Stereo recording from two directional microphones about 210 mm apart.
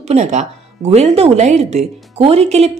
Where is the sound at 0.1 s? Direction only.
35° right (ahead or behind).